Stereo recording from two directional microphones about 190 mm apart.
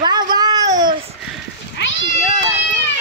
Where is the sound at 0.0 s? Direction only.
20° right (ahead or behind).